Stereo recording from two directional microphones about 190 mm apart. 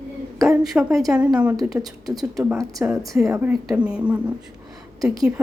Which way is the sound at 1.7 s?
20° right (ahead or behind).